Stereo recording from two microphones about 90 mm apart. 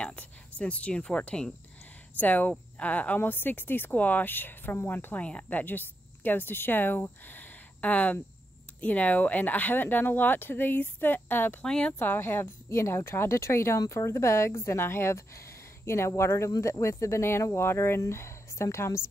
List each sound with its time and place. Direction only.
0.0 s a sound: 15° left (ahead or behind)
0.6 s speech: 15° left (ahead or behind)
11.6 s speech: 10° left (ahead or behind)
12.0 s a woman's voice: 25° left (ahead or behind)